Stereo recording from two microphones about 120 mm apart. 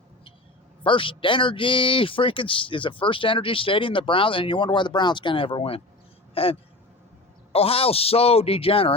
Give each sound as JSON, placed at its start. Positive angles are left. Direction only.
{"t": 0.9, "sound": "speech", "side_deg": 45}